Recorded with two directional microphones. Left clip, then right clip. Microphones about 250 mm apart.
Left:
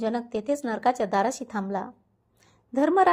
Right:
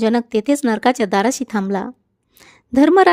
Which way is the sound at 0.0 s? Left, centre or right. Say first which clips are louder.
Right 11 dB; right.